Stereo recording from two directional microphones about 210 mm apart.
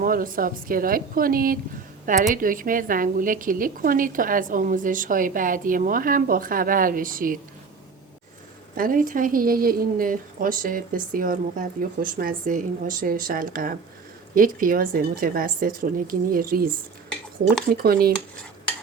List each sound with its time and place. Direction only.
0.0 s a woman's voice: 40° right (ahead or behind)
8.7 s a woman's voice: 40° right (ahead or behind)